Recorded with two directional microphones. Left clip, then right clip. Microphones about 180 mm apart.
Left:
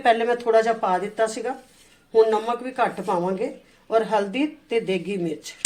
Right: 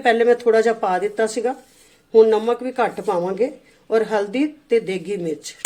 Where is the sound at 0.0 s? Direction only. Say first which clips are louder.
Right 4 dB; 35° right (ahead or behind).